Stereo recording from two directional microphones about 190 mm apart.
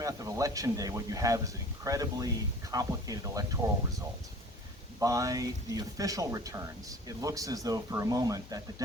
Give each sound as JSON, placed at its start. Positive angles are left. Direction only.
{"t": 0.0, "sound": "speech", "side_deg": -15}
{"t": 4.9, "sound": "speech", "side_deg": -15}